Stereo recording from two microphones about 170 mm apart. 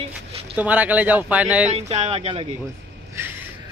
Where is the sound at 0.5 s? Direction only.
10° right (ahead or behind).